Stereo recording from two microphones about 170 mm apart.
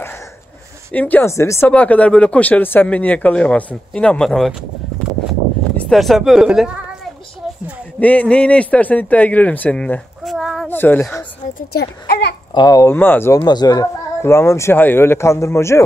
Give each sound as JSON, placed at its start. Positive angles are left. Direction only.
{"t": 0.9, "sound": "speech", "side_deg": 10}
{"t": 5.8, "sound": "speech", "side_deg": 0}
{"t": 8.0, "sound": "a man's voice", "side_deg": 10}
{"t": 10.7, "sound": "speech", "side_deg": 10}
{"t": 11.7, "sound": "a child's voice", "side_deg": 70}
{"t": 12.5, "sound": "speech", "side_deg": 20}